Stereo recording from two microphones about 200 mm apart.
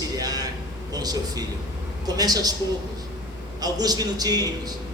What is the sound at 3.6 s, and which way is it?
Speech, 20° right (ahead or behind).